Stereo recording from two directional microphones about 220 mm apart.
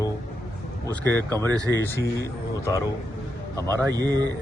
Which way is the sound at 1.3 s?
15° right (ahead or behind).